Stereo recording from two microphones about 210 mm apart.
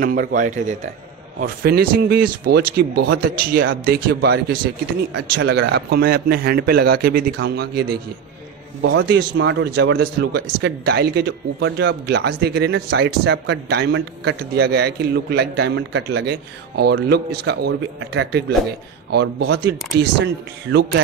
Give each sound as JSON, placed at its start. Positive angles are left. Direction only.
{"t": 0.0, "sound": "a man's voice", "side_deg": -40}